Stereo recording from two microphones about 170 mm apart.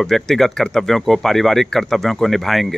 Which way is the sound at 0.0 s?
Centre (ahead or behind).